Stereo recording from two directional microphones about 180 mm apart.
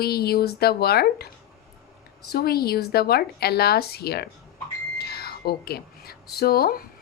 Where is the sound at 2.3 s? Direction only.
60° left (ahead or behind).